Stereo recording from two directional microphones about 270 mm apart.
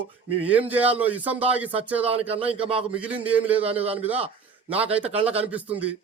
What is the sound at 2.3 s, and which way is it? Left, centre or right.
Speech, right.